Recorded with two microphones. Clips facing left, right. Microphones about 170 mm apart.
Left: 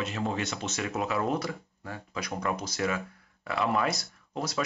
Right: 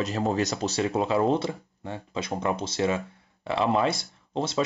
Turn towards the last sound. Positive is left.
turn(degrees=-25)  # may be behind; listen again after turning